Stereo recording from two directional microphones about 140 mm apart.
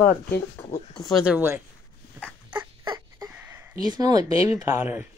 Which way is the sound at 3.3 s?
15° right (ahead or behind).